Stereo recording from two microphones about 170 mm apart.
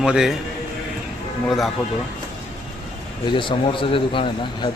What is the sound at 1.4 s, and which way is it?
Speech, centre (ahead or behind).